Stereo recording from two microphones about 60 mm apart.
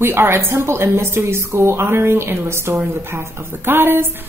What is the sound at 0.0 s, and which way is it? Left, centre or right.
A woman's voice, right.